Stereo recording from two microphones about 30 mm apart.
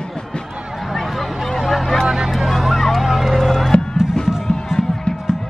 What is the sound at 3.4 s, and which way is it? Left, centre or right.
Music, centre.